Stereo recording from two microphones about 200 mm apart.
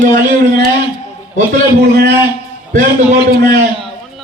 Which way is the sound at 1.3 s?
50° right (ahead or behind).